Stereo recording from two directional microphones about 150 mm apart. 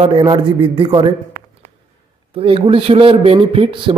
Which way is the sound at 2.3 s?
35° right (ahead or behind).